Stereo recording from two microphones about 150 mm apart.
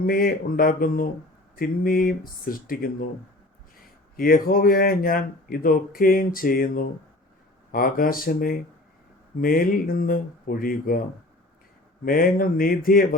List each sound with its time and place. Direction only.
0.0 s speech: 75° left (ahead or behind)
4.2 s speech: 75° left (ahead or behind)
12.0 s speech: 70° left (ahead or behind)